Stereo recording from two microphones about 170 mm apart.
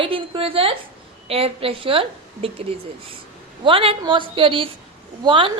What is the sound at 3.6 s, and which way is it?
A woman's voice, 30° right (ahead or behind).